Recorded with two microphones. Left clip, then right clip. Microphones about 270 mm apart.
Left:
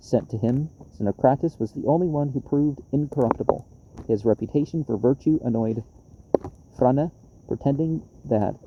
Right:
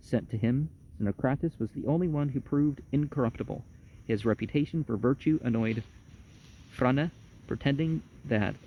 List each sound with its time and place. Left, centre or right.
0.0 s speech: right